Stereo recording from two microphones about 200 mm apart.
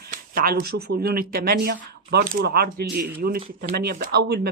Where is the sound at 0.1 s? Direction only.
45° right (ahead or behind).